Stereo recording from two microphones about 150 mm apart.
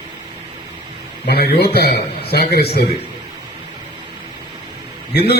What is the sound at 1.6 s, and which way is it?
A man's voice, 90° left.